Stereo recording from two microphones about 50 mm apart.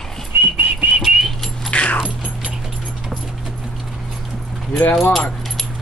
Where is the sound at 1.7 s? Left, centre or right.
Left.